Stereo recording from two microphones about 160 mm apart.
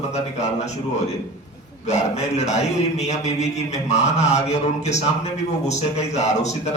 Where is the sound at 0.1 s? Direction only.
45° left (ahead or behind).